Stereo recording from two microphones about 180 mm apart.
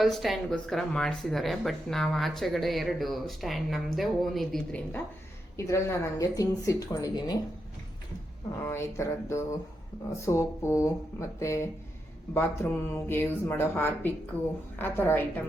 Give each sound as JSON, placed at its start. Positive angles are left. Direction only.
{"t": 0.0, "sound": "speech", "side_deg": 0}
{"t": 8.6, "sound": "speech", "side_deg": 15}